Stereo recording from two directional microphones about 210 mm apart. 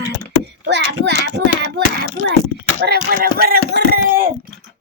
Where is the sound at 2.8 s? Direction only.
45° right (ahead or behind).